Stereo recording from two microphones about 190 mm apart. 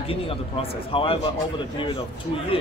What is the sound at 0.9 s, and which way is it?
Speech, 30° left (ahead or behind).